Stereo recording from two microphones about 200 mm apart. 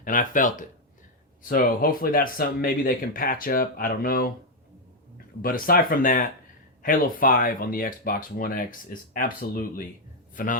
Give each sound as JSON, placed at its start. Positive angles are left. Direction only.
{"t": 0.0, "sound": "speech", "side_deg": 40}
{"t": 5.4, "sound": "a man's voice", "side_deg": 45}